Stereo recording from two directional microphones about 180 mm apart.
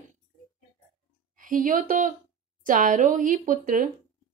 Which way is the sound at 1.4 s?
50° right (ahead or behind).